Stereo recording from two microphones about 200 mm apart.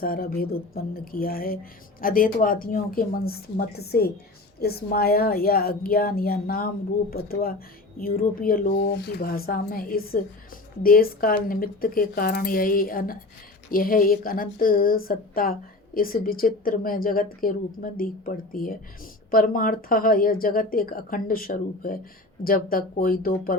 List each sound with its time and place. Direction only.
0.0 s speech: 45° left (ahead or behind)